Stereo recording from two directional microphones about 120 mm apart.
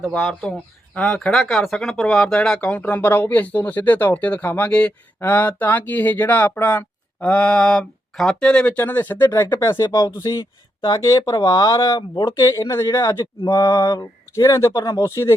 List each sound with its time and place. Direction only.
0.1 s speech: 5° left (ahead or behind); by 15.4 s 25° left (ahead or behind)